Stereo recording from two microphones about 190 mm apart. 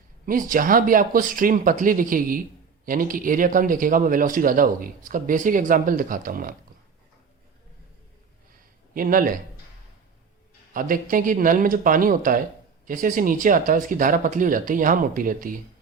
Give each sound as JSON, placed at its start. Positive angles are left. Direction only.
{"t": 0.3, "sound": "a man's voice", "side_deg": -45}
{"t": 9.0, "sound": "a man's voice", "side_deg": -50}
{"t": 10.8, "sound": "a man's voice", "side_deg": -45}